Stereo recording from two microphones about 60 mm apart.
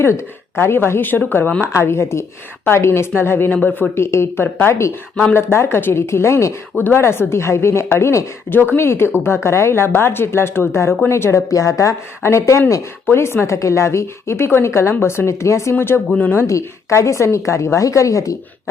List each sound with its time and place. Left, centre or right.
0.0 s speech: left
1.6 s a woman's voice: left
3.9 s a woman's voice: left